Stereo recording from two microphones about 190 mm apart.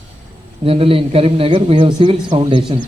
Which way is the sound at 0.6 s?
30° right (ahead or behind).